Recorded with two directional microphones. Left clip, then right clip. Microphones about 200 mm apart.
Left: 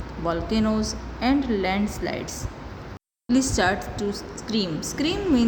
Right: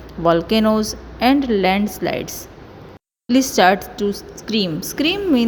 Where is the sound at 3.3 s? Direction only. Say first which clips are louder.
Right 8 dB; 35° right (ahead or behind).